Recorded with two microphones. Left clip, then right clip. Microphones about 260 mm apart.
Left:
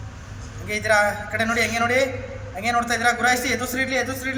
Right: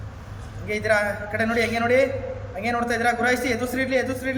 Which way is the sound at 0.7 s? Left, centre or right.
Centre.